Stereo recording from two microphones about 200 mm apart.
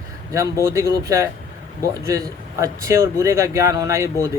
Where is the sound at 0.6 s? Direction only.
15° right (ahead or behind).